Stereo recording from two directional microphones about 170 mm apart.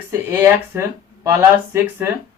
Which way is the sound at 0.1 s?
15° right (ahead or behind).